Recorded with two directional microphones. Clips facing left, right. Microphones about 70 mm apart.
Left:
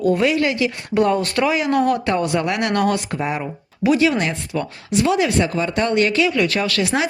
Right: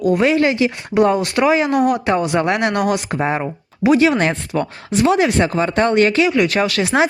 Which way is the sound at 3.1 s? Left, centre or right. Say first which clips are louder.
Right 4 dB; right.